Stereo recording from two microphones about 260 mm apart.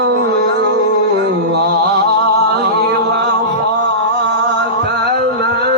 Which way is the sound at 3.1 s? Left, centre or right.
Right.